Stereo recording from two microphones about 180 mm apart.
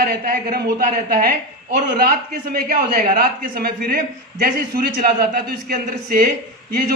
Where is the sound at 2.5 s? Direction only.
50° right (ahead or behind).